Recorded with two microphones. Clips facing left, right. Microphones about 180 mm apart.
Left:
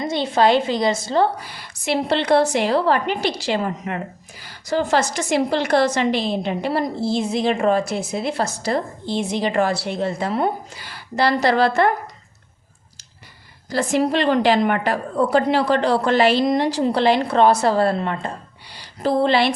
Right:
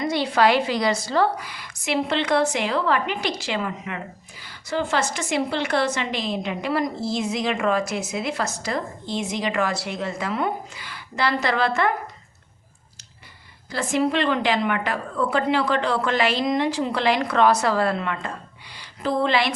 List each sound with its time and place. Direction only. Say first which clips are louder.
0.0 s a woman's voice: left 2 dB; 25° left (ahead or behind)
13.7 s a woman's voice: left 3 dB; 40° left (ahead or behind)